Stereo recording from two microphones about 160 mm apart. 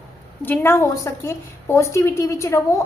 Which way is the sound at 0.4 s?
15° left (ahead or behind).